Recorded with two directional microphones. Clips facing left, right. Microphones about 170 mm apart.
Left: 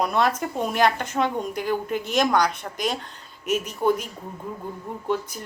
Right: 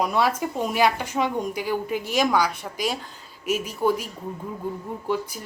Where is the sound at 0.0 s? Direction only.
10° right (ahead or behind).